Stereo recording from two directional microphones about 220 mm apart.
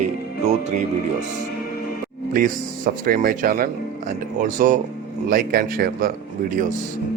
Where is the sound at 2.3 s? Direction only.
40° right (ahead or behind).